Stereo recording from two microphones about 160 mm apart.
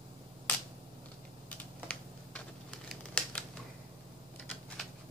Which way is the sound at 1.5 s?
10° left (ahead or behind).